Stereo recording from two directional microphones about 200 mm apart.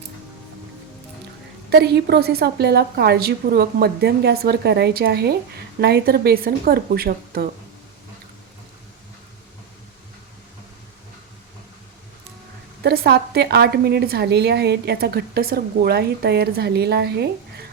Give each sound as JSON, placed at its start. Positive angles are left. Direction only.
{"t": 1.7, "sound": "a woman's voice", "side_deg": -55}
{"t": 12.8, "sound": "a woman's voice", "side_deg": -55}